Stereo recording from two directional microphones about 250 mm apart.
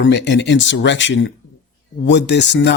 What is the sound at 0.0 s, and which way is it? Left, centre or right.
A man's voice, left.